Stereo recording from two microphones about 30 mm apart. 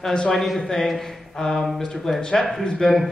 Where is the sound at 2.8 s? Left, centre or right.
Left.